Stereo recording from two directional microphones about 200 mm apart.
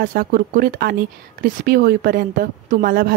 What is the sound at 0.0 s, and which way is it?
A woman's voice, 45° right (ahead or behind).